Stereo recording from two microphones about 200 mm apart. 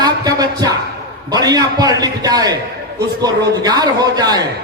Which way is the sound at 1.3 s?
20° right (ahead or behind).